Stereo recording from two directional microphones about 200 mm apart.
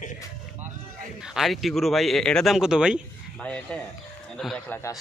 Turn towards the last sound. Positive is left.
turn(degrees=5)  # may be behind; listen again after turning